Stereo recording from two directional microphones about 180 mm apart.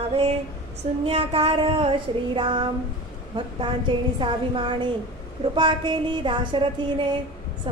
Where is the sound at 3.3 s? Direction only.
25° right (ahead or behind).